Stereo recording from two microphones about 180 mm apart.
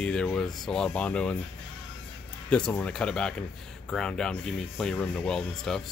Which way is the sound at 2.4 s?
5° left (ahead or behind).